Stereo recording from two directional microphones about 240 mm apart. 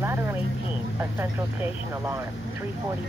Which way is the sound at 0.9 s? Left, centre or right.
Centre.